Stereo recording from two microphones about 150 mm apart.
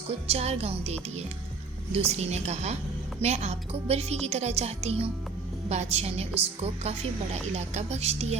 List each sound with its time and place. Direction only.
0.3 s a woman's voice: 45° right (ahead or behind)